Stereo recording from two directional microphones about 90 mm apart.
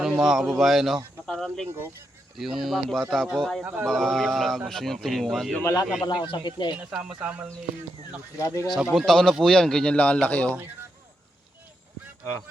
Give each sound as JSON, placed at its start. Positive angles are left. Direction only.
{"t": 0.0, "sound": "speech", "side_deg": -5}
{"t": 1.3, "sound": "snake", "side_deg": 5}
{"t": 2.3, "sound": "speech", "side_deg": 0}
{"t": 3.6, "sound": "speech", "side_deg": -15}
{"t": 3.8, "sound": "speech", "side_deg": 5}
{"t": 6.1, "sound": "speech", "side_deg": 60}
{"t": 6.7, "sound": "speech", "side_deg": -10}
{"t": 8.4, "sound": "speech", "side_deg": 35}
{"t": 9.0, "sound": "speech", "side_deg": 5}